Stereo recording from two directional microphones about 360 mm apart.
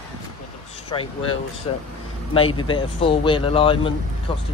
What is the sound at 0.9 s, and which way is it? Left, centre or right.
Speech, centre.